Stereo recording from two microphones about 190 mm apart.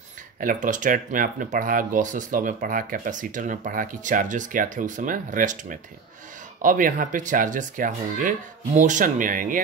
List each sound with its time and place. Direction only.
0.4 s speech: 45° right (ahead or behind)